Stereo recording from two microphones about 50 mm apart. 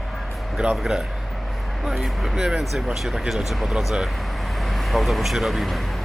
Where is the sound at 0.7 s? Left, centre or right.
Centre.